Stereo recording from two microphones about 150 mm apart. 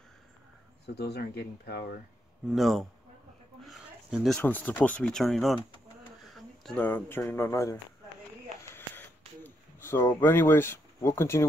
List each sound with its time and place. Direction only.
0.9 s speech: 90° left
2.4 s speech: centre (ahead or behind)
3.6 s a sound: centre (ahead or behind)
4.4 s speech: 10° left (ahead or behind)
9.4 s speech: 15° left (ahead or behind)